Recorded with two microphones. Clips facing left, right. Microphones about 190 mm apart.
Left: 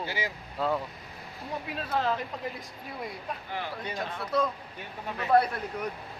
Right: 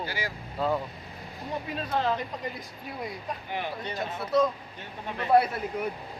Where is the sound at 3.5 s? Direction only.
20° right (ahead or behind).